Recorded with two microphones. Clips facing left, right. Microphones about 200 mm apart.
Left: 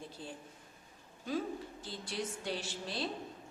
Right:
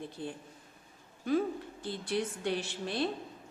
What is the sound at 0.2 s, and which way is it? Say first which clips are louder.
Speech: right 7 dB; 60° right (ahead or behind).